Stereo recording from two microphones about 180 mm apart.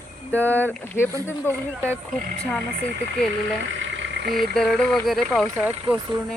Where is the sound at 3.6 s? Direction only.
90° right; by 4.4 s 70° right (ahead or behind).